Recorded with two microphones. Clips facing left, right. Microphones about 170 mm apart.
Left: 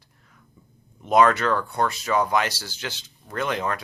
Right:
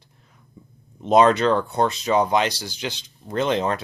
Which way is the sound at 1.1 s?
20° right (ahead or behind).